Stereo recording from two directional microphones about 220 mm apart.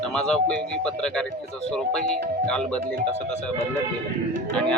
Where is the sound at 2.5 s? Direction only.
5° left (ahead or behind).